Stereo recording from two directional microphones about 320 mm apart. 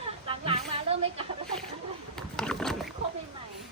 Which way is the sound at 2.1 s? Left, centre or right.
Centre.